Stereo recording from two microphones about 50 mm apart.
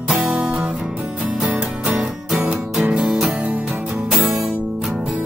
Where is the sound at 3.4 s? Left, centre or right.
Right.